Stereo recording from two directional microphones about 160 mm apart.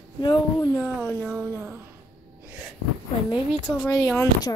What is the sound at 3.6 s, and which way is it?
Speech, 10° left (ahead or behind).